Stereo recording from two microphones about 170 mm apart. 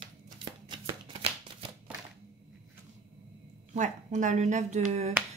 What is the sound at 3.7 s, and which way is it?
A woman's voice, 45° right (ahead or behind).